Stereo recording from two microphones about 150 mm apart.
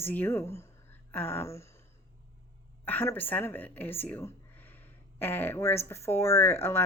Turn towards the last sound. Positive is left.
turn(degrees=15)  # may be behind; listen again after turning